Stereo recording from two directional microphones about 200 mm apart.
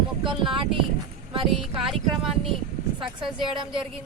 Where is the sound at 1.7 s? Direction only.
Centre (ahead or behind).